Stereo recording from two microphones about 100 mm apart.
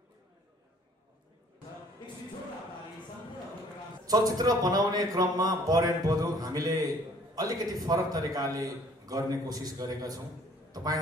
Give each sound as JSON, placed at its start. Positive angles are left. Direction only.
{"t": 4.0, "sound": "a man's voice", "side_deg": -40}